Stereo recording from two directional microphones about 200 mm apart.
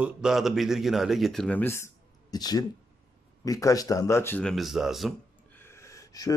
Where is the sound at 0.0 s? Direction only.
5° right (ahead or behind).